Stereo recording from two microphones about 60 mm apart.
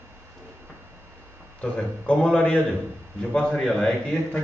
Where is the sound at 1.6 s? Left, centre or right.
Centre.